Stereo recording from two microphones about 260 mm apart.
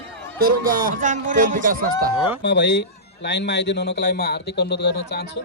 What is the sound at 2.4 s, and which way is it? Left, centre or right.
A man's voice, left.